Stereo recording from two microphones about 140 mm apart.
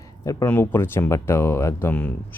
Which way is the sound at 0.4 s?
15° left (ahead or behind).